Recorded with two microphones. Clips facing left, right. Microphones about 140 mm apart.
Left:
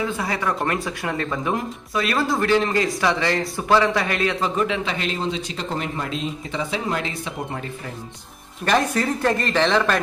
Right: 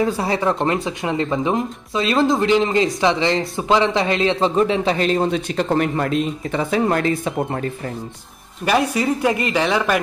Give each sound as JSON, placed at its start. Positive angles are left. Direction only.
{"t": 0.0, "sound": "speech", "side_deg": -30}
{"t": 8.6, "sound": "speech", "side_deg": -10}